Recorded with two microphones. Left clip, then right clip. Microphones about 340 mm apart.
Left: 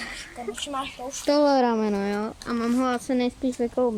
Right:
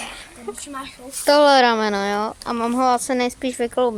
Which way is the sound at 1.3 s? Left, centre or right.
Right.